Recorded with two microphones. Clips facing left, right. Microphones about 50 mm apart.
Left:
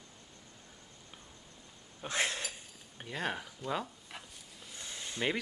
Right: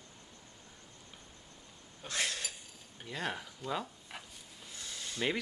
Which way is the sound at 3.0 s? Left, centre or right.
Centre.